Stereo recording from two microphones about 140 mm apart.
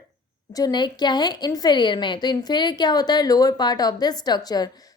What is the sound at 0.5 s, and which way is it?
A woman's voice, 30° left (ahead or behind).